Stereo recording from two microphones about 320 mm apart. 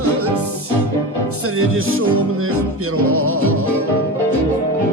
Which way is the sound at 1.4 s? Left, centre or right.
Right.